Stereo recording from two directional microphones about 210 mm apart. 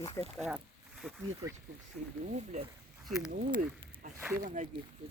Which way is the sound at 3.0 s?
Centre (ahead or behind).